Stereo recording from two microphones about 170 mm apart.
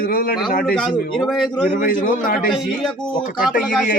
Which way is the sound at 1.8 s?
50° left (ahead or behind).